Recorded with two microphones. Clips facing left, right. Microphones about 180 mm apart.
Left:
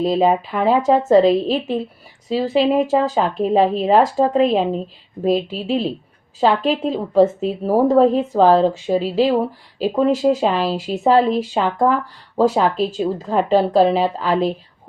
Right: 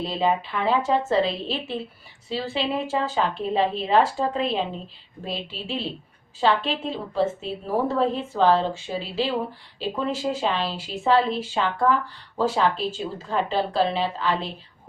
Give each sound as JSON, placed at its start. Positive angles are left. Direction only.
{"t": 0.0, "sound": "a woman's voice", "side_deg": 40}